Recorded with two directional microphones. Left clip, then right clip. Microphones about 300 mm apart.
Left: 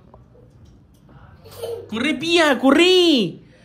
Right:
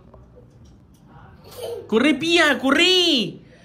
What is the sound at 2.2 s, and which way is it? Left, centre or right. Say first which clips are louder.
Speech: left 1 dB; centre.